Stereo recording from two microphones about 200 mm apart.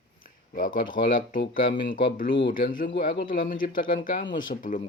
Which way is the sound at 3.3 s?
45° left (ahead or behind).